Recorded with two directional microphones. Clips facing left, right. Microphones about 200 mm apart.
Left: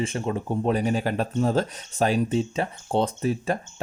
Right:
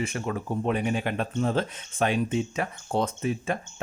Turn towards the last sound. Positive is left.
turn(degrees=35)  # may be behind; listen again after turning